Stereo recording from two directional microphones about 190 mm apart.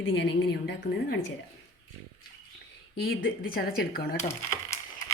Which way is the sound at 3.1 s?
50° left (ahead or behind).